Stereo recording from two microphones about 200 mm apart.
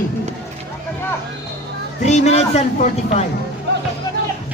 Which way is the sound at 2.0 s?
35° left (ahead or behind).